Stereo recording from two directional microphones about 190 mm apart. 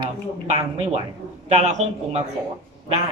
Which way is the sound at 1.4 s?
35° right (ahead or behind).